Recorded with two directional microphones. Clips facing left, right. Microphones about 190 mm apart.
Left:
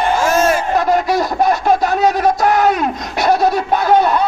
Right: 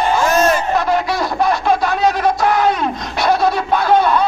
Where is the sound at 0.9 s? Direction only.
45° left (ahead or behind).